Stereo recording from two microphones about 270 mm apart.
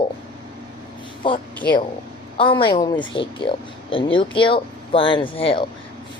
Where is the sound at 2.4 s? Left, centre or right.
Centre.